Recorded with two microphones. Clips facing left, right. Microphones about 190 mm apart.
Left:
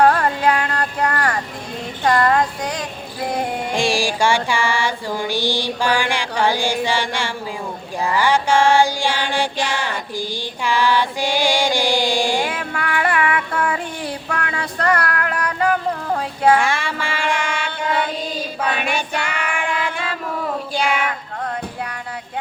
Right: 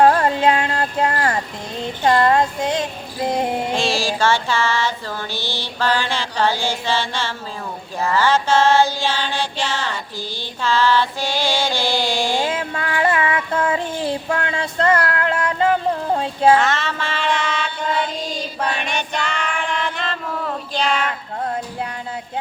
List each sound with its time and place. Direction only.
0.0 s a sound: 25° right (ahead or behind)
2.0 s speech: 25° right (ahead or behind)
3.2 s a sound: 20° right (ahead or behind)
3.8 s music: 15° left (ahead or behind)
12.5 s child singing: 25° right (ahead or behind)
16.6 s music: 10° left (ahead or behind)
18.8 s child singing: 10° left (ahead or behind)
20.7 s child singing: 10° left (ahead or behind)